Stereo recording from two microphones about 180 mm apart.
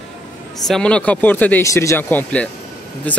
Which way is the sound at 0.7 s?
5° left (ahead or behind).